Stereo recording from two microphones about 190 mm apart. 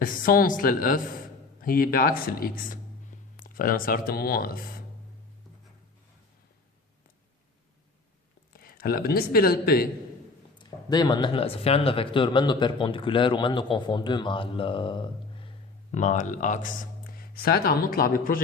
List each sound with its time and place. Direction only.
0.0 s speech: 50° left (ahead or behind)
8.5 s speech: 50° left (ahead or behind)
10.6 s speech: 20° left (ahead or behind); by 18.3 s 50° left (ahead or behind)